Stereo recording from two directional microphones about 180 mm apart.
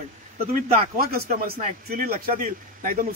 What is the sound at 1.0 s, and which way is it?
A man's voice, 55° right (ahead or behind).